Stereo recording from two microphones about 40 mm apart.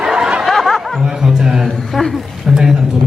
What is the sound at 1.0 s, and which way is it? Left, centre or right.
Music, centre.